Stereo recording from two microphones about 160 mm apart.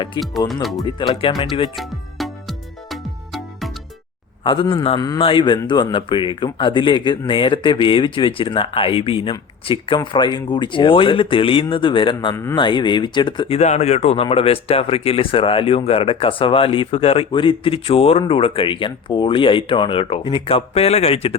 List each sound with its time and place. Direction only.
0.2 s speech: centre (ahead or behind)
0.9 s speech: 35° left (ahead or behind)
1.7 s music: centre (ahead or behind)
4.4 s speech: 30° left (ahead or behind)
4.9 s speech: 20° left (ahead or behind)
13.6 s speech: 45° left (ahead or behind)